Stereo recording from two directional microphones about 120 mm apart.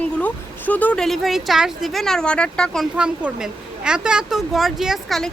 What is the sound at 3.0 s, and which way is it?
Speech, 5° right (ahead or behind).